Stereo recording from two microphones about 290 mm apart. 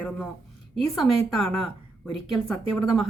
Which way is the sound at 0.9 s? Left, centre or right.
Centre.